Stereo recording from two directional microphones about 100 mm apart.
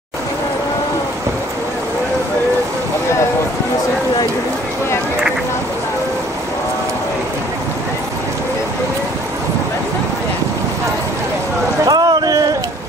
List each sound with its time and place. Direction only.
11.8 s boat: 40° right (ahead or behind)